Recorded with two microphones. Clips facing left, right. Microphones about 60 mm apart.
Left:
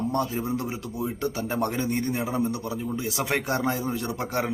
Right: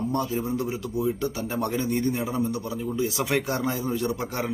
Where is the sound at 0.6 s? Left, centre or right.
Left.